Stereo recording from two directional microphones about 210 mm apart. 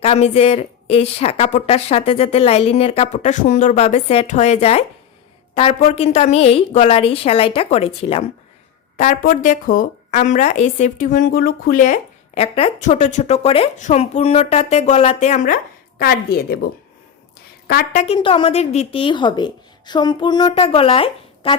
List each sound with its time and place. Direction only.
0.0 s speech: 30° left (ahead or behind)
9.0 s a woman's voice: 40° left (ahead or behind)
16.0 s a woman's voice: 45° left (ahead or behind)
17.9 s speech: 30° left (ahead or behind)